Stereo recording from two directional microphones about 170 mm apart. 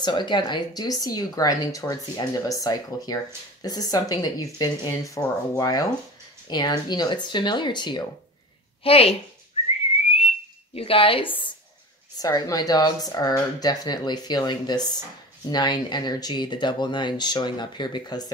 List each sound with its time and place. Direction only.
0.0 s a woman's voice: 25° left (ahead or behind)
10.0 s whistling: 35° left (ahead or behind)
12.2 s speech: 20° left (ahead or behind)